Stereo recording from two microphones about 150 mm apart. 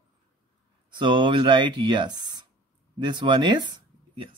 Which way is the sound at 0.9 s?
30° right (ahead or behind).